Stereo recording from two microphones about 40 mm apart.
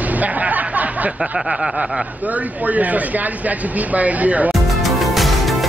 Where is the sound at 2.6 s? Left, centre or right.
Right.